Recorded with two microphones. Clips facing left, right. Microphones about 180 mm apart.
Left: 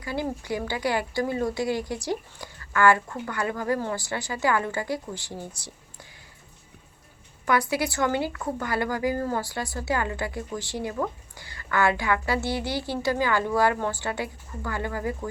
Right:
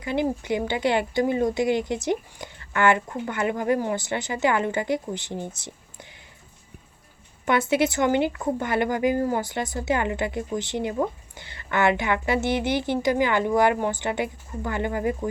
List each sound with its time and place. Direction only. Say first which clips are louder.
0.0 s a woman's voice: right 5 dB; 20° right (ahead or behind)
7.4 s a woman's voice: right 3 dB; 25° right (ahead or behind)